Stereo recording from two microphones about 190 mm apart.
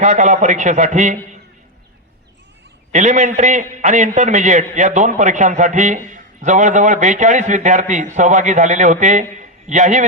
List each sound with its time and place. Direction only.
0.0 s a man's voice: 40° right (ahead or behind)
2.9 s a man's voice: 40° right (ahead or behind)
9.4 s a sound: 40° right (ahead or behind)